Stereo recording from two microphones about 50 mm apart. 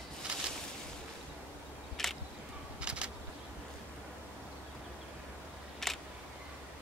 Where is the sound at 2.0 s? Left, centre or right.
Centre.